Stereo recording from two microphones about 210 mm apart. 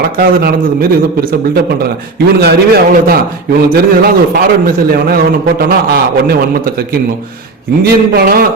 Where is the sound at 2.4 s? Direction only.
50° right (ahead or behind).